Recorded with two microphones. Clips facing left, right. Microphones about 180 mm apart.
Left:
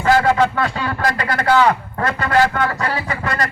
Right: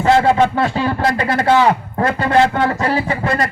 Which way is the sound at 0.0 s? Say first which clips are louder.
Right 2 dB; 25° right (ahead or behind).